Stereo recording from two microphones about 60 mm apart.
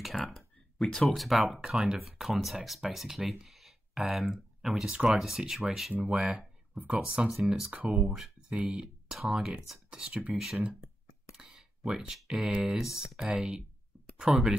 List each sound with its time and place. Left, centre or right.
0.0 s a sound: centre
1.0 s speech: centre
3.4 s a sound: centre
4.6 s speech: centre
4.8 s speech: centre
5.1 s speech: centre
6.2 s a sound: centre
6.8 s speech: right
7.4 s speech: centre
7.7 s speech: right
8.2 s speech: centre
10.3 s speech: centre
11.3 s a sound: centre
12.1 s speech: centre